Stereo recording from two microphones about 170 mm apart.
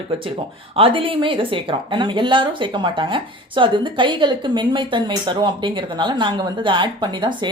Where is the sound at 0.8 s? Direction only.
30° right (ahead or behind).